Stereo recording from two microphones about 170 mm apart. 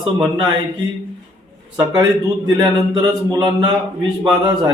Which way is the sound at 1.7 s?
25° right (ahead or behind).